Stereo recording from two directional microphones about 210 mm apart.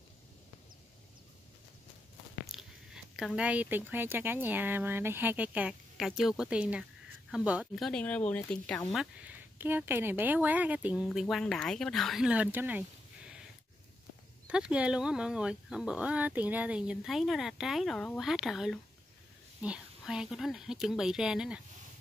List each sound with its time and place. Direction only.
2.4 s speech: centre (ahead or behind)
14.5 s speech: 5° right (ahead or behind)